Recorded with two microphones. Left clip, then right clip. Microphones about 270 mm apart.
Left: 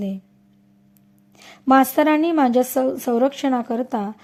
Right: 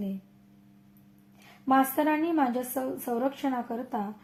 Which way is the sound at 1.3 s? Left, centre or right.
Left.